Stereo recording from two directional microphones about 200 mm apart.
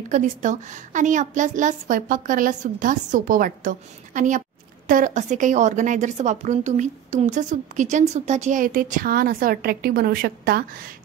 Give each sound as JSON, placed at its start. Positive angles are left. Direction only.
{"t": 0.1, "sound": "a woman's voice", "side_deg": -40}